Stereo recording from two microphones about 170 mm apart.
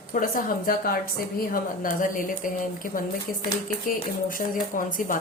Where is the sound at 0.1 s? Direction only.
55° left (ahead or behind).